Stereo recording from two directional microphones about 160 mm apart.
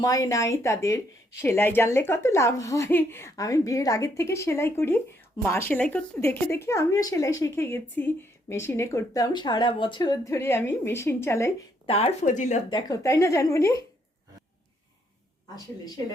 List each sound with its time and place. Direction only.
0.0 s speech: 20° left (ahead or behind)
11.9 s speech: 40° left (ahead or behind)
12.7 s speech: 20° left (ahead or behind)